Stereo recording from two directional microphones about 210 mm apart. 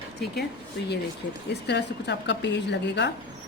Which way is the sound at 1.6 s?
55° left (ahead or behind).